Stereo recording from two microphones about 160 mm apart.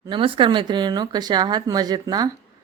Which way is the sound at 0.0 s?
30° right (ahead or behind).